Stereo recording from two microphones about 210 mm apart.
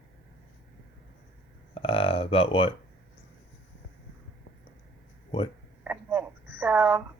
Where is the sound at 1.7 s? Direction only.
25° left (ahead or behind).